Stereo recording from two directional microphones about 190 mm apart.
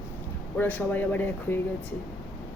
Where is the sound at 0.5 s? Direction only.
10° left (ahead or behind).